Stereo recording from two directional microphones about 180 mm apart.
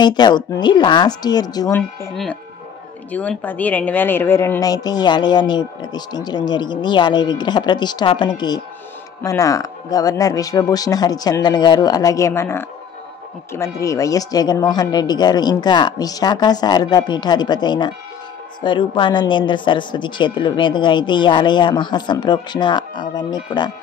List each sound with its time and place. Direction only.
0.0 s a woman's voice: 25° left (ahead or behind)
3.1 s a woman's voice: 10° left (ahead or behind); by 23.7 s 25° left (ahead or behind)